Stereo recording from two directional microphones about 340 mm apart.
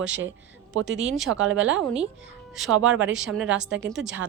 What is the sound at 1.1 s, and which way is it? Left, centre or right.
Speech, centre.